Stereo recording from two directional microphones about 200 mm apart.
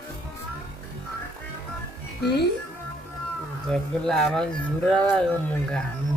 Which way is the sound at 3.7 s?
5° left (ahead or behind).